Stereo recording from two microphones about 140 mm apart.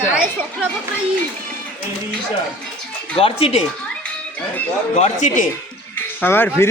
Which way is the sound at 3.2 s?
40° left (ahead or behind).